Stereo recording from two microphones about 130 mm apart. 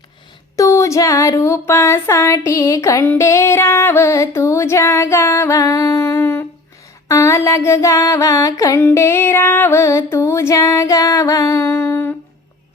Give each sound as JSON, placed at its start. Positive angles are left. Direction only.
{"t": 0.5, "sound": "female singing", "side_deg": 25}
{"t": 8.8, "sound": "music", "side_deg": 20}
{"t": 10.1, "sound": "female singing", "side_deg": 20}